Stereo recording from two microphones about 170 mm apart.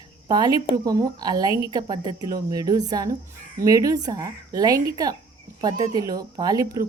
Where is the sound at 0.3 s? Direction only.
25° right (ahead or behind).